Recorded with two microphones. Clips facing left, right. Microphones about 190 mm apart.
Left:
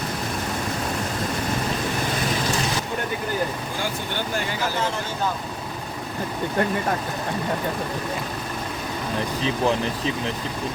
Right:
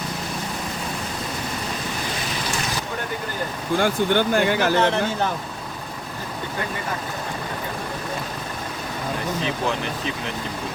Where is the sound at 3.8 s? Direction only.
65° right (ahead or behind).